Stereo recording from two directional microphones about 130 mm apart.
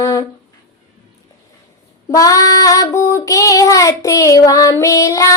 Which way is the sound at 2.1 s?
25° left (ahead or behind).